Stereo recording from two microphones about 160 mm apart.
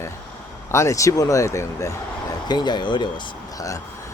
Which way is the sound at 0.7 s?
20° left (ahead or behind).